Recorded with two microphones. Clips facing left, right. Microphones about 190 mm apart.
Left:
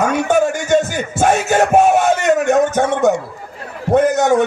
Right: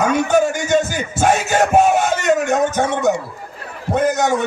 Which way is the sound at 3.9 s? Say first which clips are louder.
Left 4 dB; 55° left (ahead or behind).